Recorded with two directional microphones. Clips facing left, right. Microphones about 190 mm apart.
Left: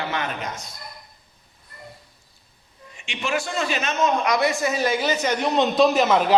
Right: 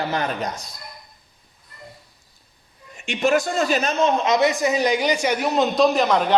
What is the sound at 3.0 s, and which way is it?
A man's voice, 45° right (ahead or behind).